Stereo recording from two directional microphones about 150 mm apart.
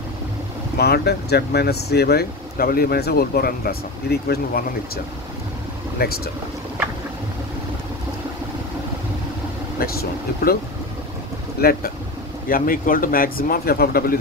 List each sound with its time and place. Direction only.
0.7 s speech: 90° left
11.6 s speech: 90° left
12.4 s speech: 70° left (ahead or behind); by 14.1 s 85° left